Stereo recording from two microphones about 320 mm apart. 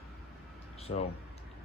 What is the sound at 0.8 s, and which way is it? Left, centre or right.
Speech, centre.